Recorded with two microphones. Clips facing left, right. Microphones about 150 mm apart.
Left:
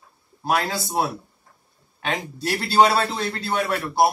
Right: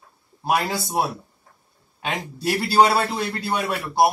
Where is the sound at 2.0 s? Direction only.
10° right (ahead or behind).